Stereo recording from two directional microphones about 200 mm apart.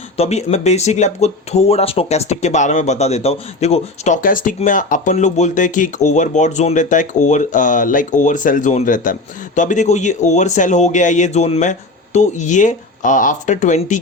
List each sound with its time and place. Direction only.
0.2 s speech: 30° left (ahead or behind)